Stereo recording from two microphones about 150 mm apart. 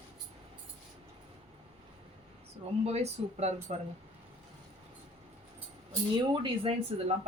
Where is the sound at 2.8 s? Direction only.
45° right (ahead or behind).